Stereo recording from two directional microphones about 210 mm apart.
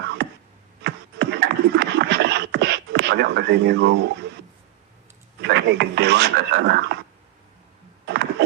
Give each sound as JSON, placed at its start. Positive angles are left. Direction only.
{"t": 0.9, "sound": "beatboxing", "side_deg": -55}
{"t": 5.4, "sound": "speech", "side_deg": -55}
{"t": 8.0, "sound": "a sound", "side_deg": -55}